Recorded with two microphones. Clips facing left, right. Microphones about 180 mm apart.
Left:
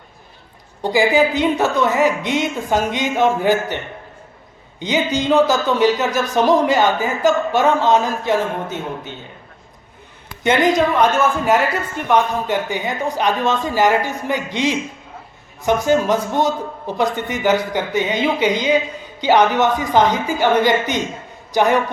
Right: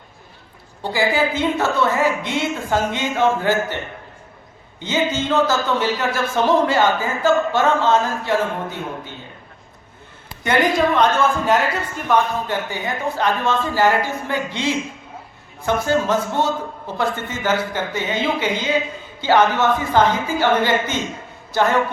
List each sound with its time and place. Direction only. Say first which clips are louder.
0.8 s a man's voice: left 4 dB; 15° left (ahead or behind)
4.8 s a man's voice: left 2 dB; 15° left (ahead or behind)
10.4 s a woman's voice: left 2 dB; 20° left (ahead or behind)
12.0 s a man's voice: left 2 dB; 15° left (ahead or behind)